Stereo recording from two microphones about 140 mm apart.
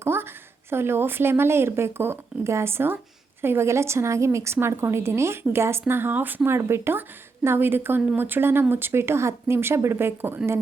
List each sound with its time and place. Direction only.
0.0 s a woman's voice: 15° right (ahead or behind)